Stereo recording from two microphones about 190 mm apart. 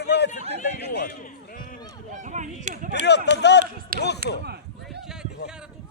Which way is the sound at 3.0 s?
65° left (ahead or behind).